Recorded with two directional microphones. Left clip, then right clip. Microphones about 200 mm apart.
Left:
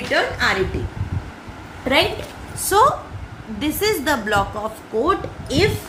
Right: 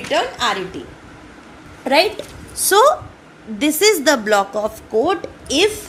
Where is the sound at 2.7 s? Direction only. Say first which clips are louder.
Right 3 dB; 45° right (ahead or behind).